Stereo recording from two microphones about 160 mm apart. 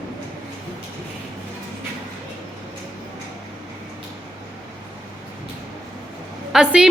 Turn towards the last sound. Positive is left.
turn(degrees=-5)  # may be behind; listen again after turning